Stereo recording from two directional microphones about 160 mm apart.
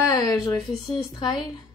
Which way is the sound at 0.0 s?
20° left (ahead or behind).